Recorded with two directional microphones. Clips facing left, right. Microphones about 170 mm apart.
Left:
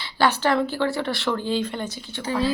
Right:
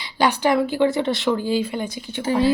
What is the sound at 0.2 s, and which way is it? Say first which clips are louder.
Speech: right 2 dB; 15° right (ahead or behind).